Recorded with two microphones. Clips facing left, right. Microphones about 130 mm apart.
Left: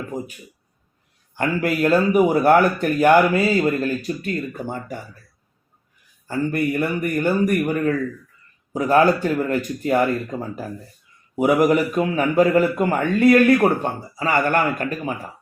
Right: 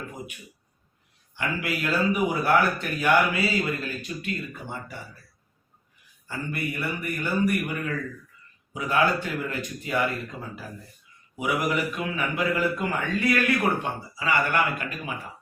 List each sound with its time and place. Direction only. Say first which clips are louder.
1.4 s a man's voice: left 9 dB; 45° left (ahead or behind)
6.2 s a man's voice: left 10 dB; 45° left (ahead or behind)
11.3 s a man's voice: left 10 dB; 45° left (ahead or behind)